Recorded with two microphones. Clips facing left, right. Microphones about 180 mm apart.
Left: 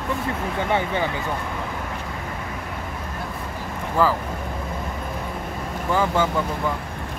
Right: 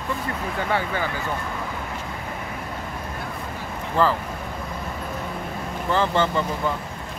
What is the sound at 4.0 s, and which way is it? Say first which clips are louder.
Speech: even; 10° left (ahead or behind).